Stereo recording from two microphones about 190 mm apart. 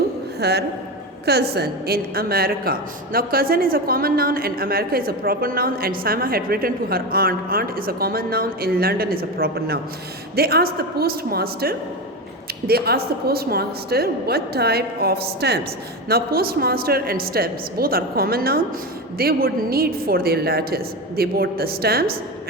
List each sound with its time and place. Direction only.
0.3 s a woman's voice: 60° right (ahead or behind)